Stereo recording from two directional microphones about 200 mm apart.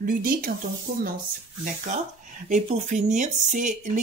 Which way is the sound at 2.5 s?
40° right (ahead or behind).